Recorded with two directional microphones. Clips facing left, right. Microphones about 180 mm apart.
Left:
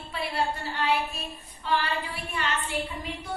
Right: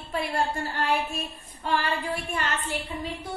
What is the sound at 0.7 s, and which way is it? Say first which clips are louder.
A woman's voice: even; 50° right (ahead or behind).